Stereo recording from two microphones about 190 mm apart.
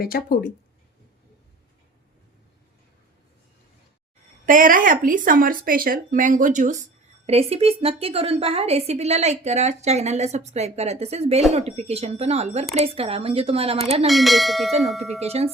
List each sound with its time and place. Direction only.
0.0 s speech: 50° left (ahead or behind)
4.4 s a woman's voice: 45° right (ahead or behind)
14.1 s speech: centre (ahead or behind)
15.2 s a woman's voice: 35° right (ahead or behind)